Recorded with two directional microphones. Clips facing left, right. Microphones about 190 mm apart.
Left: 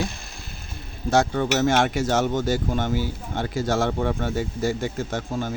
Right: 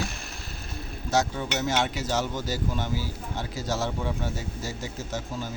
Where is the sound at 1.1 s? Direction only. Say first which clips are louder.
Left 6 dB; 60° left (ahead or behind).